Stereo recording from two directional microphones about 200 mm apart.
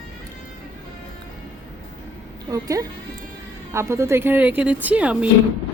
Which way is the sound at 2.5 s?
15° right (ahead or behind).